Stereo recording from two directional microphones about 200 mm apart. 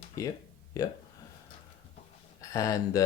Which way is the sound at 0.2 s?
15° left (ahead or behind).